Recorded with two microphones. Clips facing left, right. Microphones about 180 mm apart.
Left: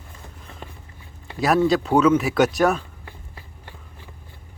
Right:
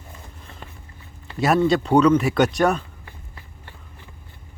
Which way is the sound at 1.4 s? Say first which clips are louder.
Even; centre (ahead or behind).